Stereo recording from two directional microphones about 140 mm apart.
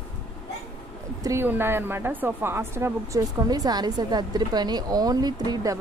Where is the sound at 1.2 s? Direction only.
20° right (ahead or behind).